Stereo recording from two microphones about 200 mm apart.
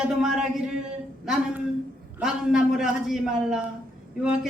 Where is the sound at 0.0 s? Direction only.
Centre (ahead or behind).